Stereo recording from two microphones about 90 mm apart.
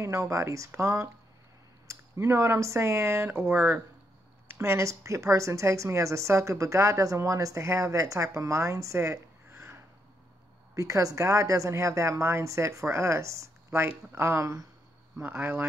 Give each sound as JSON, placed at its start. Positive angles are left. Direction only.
{"t": 0.0, "sound": "speech", "side_deg": -35}
{"t": 10.7, "sound": "speech", "side_deg": -40}